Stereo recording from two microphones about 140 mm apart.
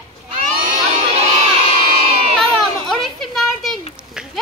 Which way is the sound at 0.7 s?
60° right (ahead or behind).